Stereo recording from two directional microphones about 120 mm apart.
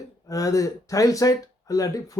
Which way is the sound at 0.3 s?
30° left (ahead or behind).